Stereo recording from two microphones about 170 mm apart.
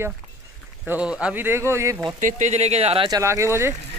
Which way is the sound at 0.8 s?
5° right (ahead or behind).